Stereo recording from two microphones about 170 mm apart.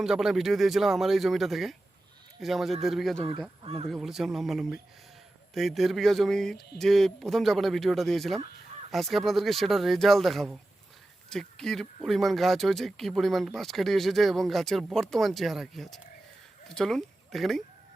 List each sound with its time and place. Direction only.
0.0 s speech: 5° right (ahead or behind)
3.2 s speech: 30° right (ahead or behind)
3.8 s speech: centre (ahead or behind)